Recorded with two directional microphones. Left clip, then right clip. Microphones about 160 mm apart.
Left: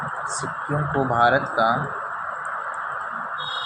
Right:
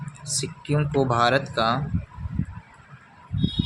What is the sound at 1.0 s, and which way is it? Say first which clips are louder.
Speech: left 4 dB; 55° right (ahead or behind).